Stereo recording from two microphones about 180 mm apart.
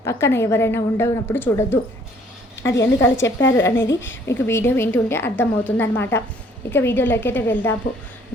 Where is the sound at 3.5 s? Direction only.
15° left (ahead or behind).